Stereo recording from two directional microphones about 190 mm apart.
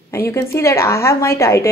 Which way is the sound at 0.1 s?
15° left (ahead or behind).